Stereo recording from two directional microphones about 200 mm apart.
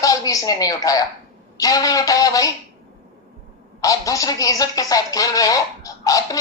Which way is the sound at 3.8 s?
15° left (ahead or behind).